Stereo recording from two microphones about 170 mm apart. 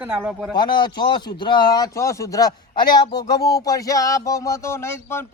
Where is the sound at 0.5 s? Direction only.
25° left (ahead or behind).